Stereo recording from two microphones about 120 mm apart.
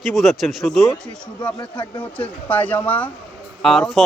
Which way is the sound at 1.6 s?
40° left (ahead or behind).